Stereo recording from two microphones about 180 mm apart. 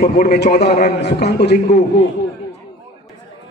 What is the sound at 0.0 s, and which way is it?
Speech, 45° left (ahead or behind).